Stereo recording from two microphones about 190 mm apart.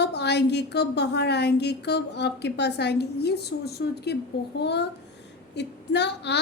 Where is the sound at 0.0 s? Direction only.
65° left (ahead or behind).